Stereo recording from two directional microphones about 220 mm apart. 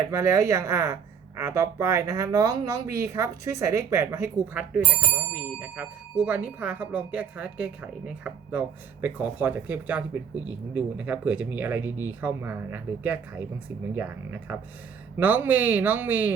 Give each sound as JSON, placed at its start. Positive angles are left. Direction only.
{"t": 0.1, "sound": "speech", "side_deg": -15}